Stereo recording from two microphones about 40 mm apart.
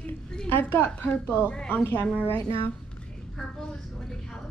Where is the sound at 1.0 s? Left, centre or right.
Left.